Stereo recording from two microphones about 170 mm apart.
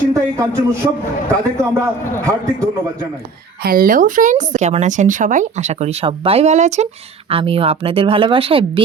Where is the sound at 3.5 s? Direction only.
60° right (ahead or behind).